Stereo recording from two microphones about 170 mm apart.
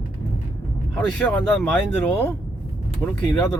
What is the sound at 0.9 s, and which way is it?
Speech, 5° left (ahead or behind).